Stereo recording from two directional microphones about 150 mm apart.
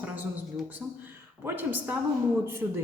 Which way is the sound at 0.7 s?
15° right (ahead or behind).